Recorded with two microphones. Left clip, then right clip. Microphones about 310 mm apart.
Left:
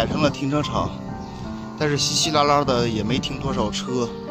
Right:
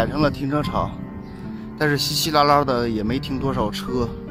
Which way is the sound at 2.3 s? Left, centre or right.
Centre.